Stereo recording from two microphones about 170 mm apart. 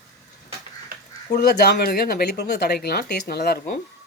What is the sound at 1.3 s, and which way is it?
Speech, 65° left (ahead or behind).